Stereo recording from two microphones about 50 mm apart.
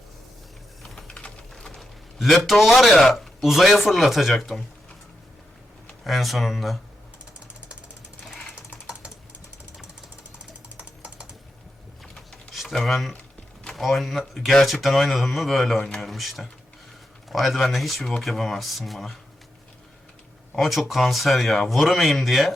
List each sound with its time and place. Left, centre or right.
0.8 s typing: centre
2.3 s speech: centre
6.1 s speech: centre
10.8 s typing: right
12.0 s a sound: centre
12.6 s speech: centre
20.6 s speech: centre